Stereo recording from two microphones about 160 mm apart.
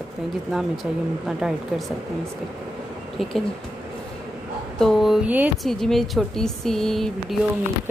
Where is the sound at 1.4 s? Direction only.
Centre (ahead or behind).